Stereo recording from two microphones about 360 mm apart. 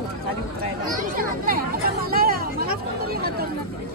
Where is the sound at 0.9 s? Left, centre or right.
Right.